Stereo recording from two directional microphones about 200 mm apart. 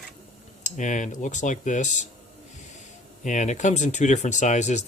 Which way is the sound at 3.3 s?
35° left (ahead or behind).